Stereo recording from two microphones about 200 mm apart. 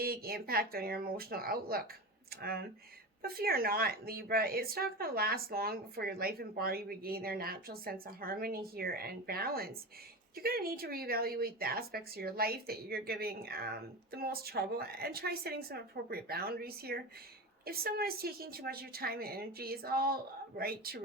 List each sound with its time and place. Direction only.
0.0 s a woman's voice: 50° right (ahead or behind)